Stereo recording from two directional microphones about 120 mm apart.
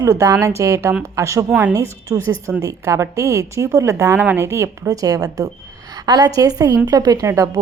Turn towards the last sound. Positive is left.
turn(degrees=-25)  # may be behind; listen again after turning